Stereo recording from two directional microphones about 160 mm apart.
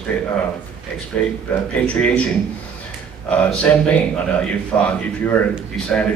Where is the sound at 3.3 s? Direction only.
5° left (ahead or behind).